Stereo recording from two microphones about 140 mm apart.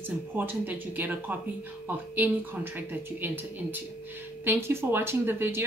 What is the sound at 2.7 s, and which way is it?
Speech, 15° right (ahead or behind).